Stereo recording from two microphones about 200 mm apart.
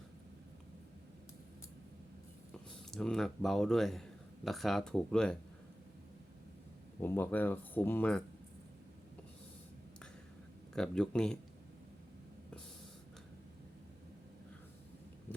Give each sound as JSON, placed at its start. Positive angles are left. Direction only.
{"t": 2.9, "sound": "speech", "side_deg": 0}
{"t": 7.0, "sound": "speech", "side_deg": 10}
{"t": 10.8, "sound": "speech", "side_deg": 5}